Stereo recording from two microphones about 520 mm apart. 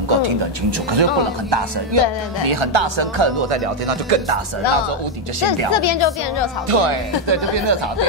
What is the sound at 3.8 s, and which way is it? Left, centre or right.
Speech, right.